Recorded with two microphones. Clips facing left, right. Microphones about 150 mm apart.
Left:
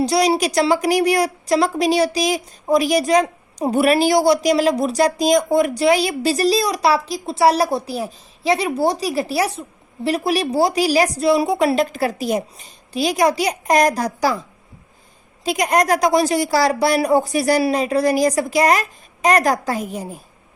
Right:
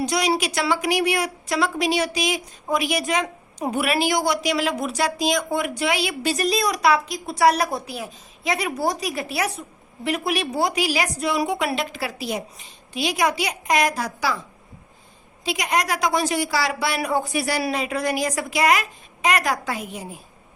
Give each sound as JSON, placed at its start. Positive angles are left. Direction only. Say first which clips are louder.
{"t": 0.0, "sound": "a woman's voice", "louder": "left 5 dB", "side_deg": 35}
{"t": 8.5, "sound": "speech", "louder": "left 4 dB", "side_deg": 25}
{"t": 11.6, "sound": "speech", "louder": "left 8 dB", "side_deg": 40}
{"t": 15.4, "sound": "a woman's voice", "louder": "left 7 dB", "side_deg": 45}